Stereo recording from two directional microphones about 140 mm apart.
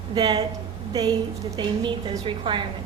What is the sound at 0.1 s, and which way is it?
Speech, 30° right (ahead or behind).